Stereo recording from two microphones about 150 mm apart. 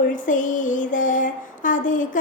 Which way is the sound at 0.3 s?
60° left (ahead or behind).